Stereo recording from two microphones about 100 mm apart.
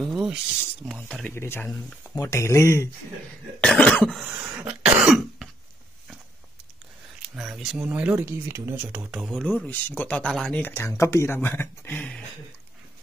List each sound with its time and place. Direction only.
0.1 s cough: 5° right (ahead or behind)
1.3 s speech: 25° left (ahead or behind)
3.6 s cough: 10° left (ahead or behind)
4.4 s cough: 15° right (ahead or behind)
7.3 s speech: 5° right (ahead or behind)
8.3 s speech: 25° right (ahead or behind)
9.3 s a man's voice: 10° left (ahead or behind)